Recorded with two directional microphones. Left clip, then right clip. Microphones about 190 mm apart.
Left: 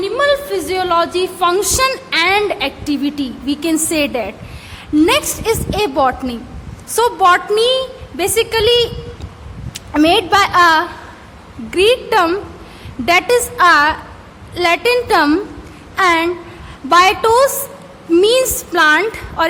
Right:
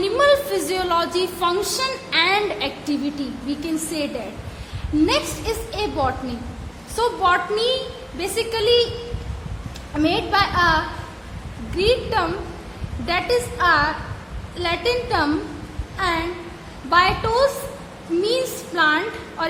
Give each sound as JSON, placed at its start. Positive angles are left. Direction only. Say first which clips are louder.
{"t": 0.0, "sound": "a woman's voice", "louder": "left 2 dB", "side_deg": 20}
{"t": 9.9, "sound": "a woman's voice", "louder": "left 8 dB", "side_deg": 40}